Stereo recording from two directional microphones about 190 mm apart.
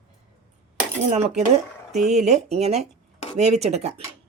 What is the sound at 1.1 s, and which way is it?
Speech, 35° right (ahead or behind).